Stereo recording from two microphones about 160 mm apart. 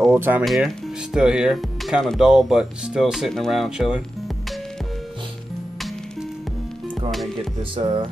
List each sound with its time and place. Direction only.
0.1 s speech: 10° right (ahead or behind)
7.7 s speech: 30° right (ahead or behind)